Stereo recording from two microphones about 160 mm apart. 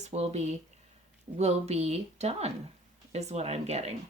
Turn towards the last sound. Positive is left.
turn(degrees=-40)  # may be behind; listen again after turning